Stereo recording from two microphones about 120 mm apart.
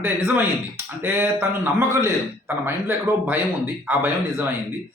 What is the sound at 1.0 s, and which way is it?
A man's voice, 20° right (ahead or behind).